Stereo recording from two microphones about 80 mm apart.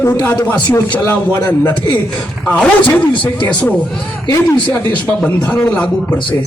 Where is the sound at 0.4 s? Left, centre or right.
Centre.